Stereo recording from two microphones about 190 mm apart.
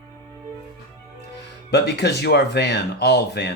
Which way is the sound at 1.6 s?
60° left (ahead or behind).